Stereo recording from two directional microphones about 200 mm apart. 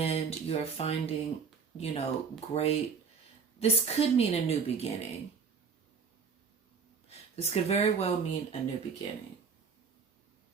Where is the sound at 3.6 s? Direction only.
30° left (ahead or behind).